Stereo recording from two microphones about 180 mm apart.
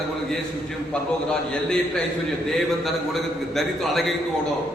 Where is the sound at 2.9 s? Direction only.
Centre (ahead or behind).